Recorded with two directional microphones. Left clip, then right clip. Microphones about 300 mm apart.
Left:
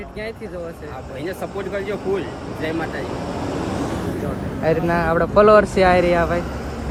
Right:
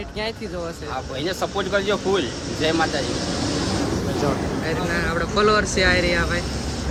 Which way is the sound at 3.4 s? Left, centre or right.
Left.